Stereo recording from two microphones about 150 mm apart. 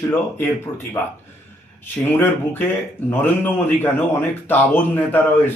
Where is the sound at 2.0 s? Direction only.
15° left (ahead or behind).